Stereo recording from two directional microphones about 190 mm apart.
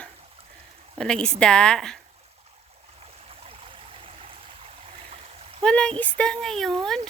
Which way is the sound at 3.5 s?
30° right (ahead or behind).